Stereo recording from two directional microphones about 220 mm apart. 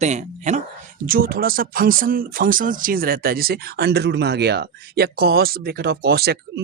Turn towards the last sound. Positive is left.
turn(degrees=-45)  # may be behind; listen again after turning